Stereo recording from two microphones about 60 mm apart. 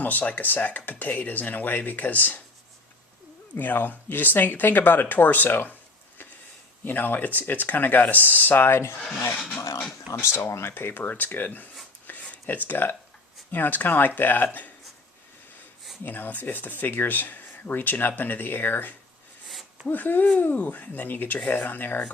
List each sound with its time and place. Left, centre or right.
0.0 s speech: left
3.5 s speech: left
6.8 s speech: left
10.2 s speech: left
12.0 s a sound: left
13.5 s speech: left
16.0 s speech: left